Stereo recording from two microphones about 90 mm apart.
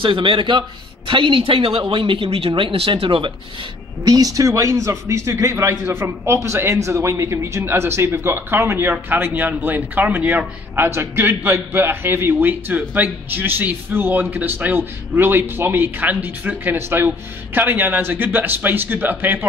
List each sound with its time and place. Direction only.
0.0 s a man's voice: 70° right (ahead or behind)
4.0 s a man's voice: 45° right (ahead or behind); by 19.4 s 20° right (ahead or behind)